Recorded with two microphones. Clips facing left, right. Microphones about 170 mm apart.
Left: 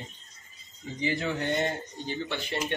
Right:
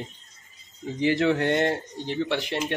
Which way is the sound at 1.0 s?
80° right.